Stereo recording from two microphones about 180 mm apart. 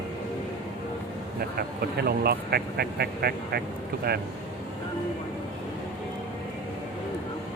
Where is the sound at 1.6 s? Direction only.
60° right (ahead or behind).